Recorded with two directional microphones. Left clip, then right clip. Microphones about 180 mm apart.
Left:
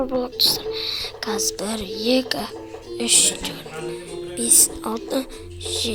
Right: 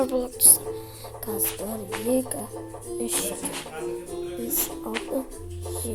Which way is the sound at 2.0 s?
5° left (ahead or behind).